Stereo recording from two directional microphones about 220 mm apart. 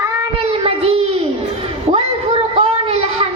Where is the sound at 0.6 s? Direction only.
25° right (ahead or behind).